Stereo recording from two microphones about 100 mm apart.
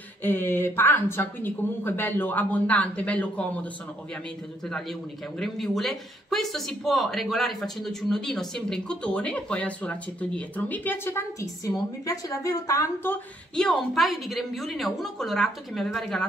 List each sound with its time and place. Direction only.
0.2 s speech: 20° left (ahead or behind)
5.4 s speech: centre (ahead or behind); by 12.8 s 35° left (ahead or behind)
13.6 s a woman's voice: 5° left (ahead or behind)